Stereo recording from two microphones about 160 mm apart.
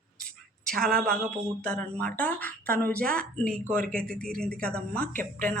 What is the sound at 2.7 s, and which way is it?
Speech, 70° right (ahead or behind).